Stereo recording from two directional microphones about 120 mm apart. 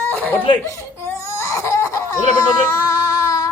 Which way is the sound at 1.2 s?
25° left (ahead or behind).